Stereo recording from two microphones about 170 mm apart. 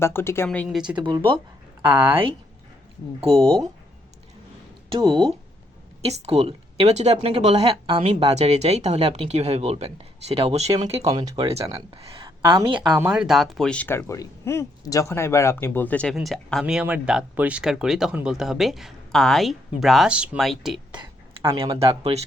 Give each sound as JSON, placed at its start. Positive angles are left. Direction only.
{"t": 0.0, "sound": "speech", "side_deg": 15}
{"t": 0.9, "sound": "speech", "side_deg": -25}
{"t": 4.9, "sound": "speech", "side_deg": -30}
{"t": 11.1, "sound": "speech", "side_deg": -25}
{"t": 11.4, "sound": "speech", "side_deg": -35}
{"t": 13.0, "sound": "speech", "side_deg": -5}
{"t": 20.9, "sound": "speech", "side_deg": -25}